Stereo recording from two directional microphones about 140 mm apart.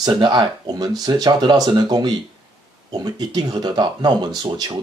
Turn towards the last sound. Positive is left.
turn(degrees=-30)  # may be behind; listen again after turning